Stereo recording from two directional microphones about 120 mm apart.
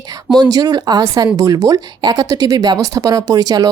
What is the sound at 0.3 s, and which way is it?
Speech, 35° right (ahead or behind).